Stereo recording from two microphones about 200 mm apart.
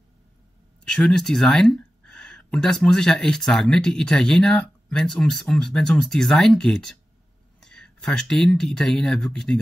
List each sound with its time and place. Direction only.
0.8 s speech: 5° left (ahead or behind)